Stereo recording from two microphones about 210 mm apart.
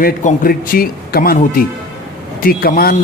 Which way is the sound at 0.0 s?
45° left (ahead or behind).